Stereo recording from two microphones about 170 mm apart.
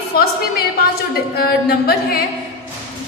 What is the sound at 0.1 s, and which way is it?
A woman's voice, 65° left (ahead or behind).